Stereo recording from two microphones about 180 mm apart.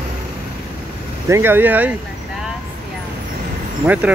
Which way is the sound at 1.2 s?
15° right (ahead or behind).